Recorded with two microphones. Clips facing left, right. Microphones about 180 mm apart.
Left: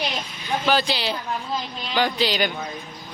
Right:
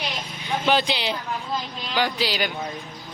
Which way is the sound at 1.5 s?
Centre (ahead or behind).